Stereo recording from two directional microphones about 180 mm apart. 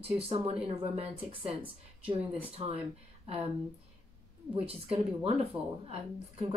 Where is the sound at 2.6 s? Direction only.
30° right (ahead or behind).